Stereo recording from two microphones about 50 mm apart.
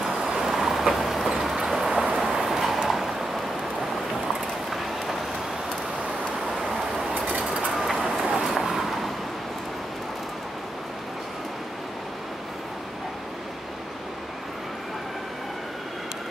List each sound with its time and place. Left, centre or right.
0.0 s vehicle: centre
1.3 s train: centre
2.1 s vehicle: centre
6.6 s vehicle: centre